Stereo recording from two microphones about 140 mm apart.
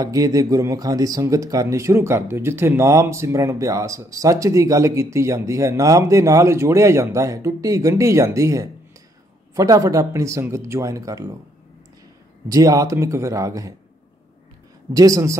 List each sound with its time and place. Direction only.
0.0 s speech: 25° right (ahead or behind)
12.4 s speech: 25° right (ahead or behind)
15.0 s speech: 25° right (ahead or behind)